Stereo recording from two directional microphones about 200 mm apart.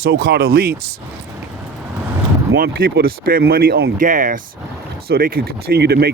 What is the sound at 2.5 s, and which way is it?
Speech, 50° right (ahead or behind).